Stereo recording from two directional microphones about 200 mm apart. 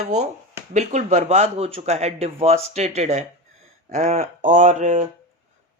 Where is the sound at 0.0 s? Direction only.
35° right (ahead or behind).